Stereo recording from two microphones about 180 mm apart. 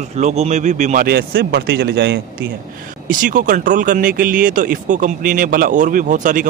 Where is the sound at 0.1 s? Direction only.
35° right (ahead or behind); by 2.1 s 70° right (ahead or behind).